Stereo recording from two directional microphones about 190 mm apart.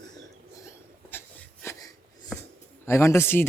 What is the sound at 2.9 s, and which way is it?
Speech, 15° left (ahead or behind).